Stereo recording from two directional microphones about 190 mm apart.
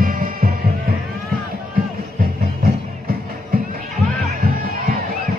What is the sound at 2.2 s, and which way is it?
Music, 50° right (ahead or behind).